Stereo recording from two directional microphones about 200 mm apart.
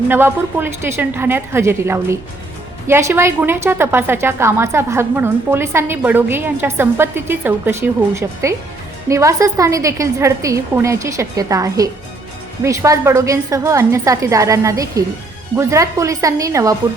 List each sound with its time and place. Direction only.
0.1 s a woman's voice: 10° right (ahead or behind)